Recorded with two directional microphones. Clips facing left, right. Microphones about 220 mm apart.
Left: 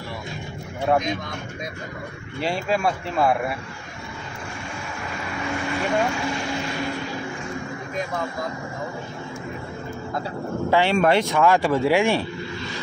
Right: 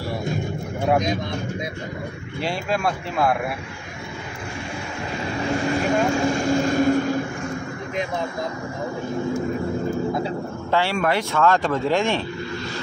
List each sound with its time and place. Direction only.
2.4 s speech: centre (ahead or behind)
5.4 s speech: 35° right (ahead or behind)
10.7 s speech: 15° left (ahead or behind)